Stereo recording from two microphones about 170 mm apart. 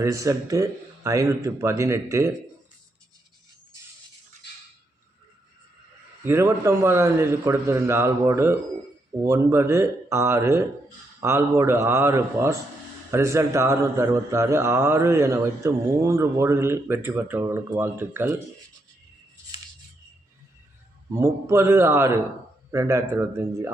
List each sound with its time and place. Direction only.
0.0 s a man's voice: 20° right (ahead or behind)
6.2 s a man's voice: 15° right (ahead or behind)
21.2 s a man's voice: 15° right (ahead or behind)